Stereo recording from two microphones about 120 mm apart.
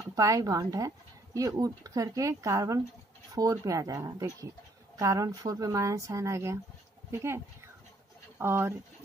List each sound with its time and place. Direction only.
0.0 s speech: 25° right (ahead or behind)